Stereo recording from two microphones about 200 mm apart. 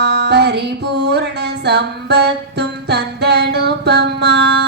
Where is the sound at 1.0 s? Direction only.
55° right (ahead or behind).